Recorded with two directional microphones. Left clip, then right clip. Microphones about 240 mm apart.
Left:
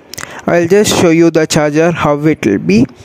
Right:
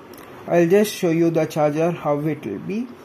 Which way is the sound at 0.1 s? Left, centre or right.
Left.